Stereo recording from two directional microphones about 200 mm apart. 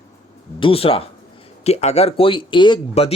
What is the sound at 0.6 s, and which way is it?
Speech, 25° left (ahead or behind).